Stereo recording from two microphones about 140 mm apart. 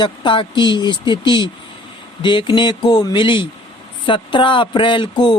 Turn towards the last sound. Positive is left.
turn(degrees=35)  # may be behind; listen again after turning